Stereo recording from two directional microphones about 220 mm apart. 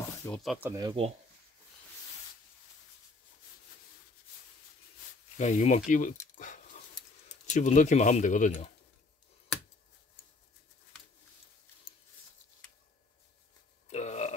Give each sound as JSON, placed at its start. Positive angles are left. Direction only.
{"t": 0.2, "sound": "speech", "side_deg": 0}
{"t": 0.7, "sound": "speech", "side_deg": -20}
{"t": 5.4, "sound": "speech", "side_deg": 30}
{"t": 6.3, "sound": "dog", "side_deg": 35}
{"t": 7.2, "sound": "speech", "side_deg": 35}
{"t": 13.8, "sound": "burping", "side_deg": 30}